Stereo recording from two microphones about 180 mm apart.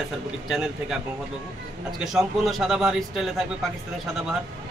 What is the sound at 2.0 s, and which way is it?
A man's voice, centre (ahead or behind).